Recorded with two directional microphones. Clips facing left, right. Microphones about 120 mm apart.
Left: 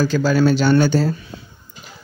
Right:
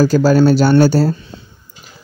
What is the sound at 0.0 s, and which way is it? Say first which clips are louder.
Speech: right 5 dB; 40° right (ahead or behind).